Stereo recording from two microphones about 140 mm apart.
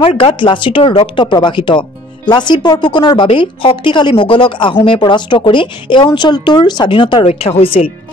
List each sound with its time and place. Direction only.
0.0 s speech: 40° left (ahead or behind)
7.2 s speech: 45° left (ahead or behind)